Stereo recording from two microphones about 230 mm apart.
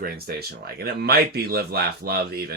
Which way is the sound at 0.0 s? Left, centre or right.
Right.